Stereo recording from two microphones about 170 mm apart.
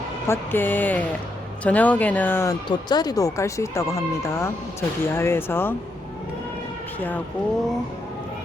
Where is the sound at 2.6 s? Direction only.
25° left (ahead or behind).